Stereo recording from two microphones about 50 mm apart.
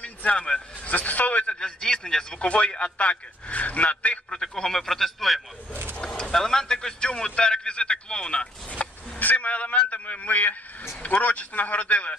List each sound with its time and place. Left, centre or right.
0.0 s a sound: left
0.8 s a man's voice: left
1.6 s speech: centre
4.3 s speech: centre
5.7 s a sound: right
5.9 s speech: centre